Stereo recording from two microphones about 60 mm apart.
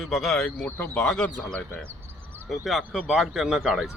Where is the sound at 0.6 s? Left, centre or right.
Left.